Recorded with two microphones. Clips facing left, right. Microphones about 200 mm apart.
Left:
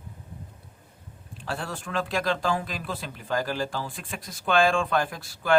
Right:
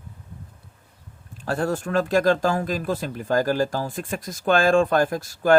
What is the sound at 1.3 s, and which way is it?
Speech, 45° right (ahead or behind).